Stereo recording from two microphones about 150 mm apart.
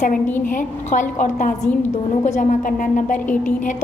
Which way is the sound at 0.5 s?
60° left (ahead or behind).